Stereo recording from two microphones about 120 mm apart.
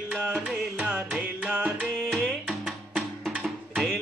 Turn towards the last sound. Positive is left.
turn(degrees=0)  # may be behind; listen again after turning